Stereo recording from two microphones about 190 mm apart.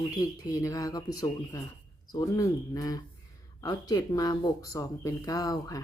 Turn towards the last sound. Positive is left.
turn(degrees=20)  # may be behind; listen again after turning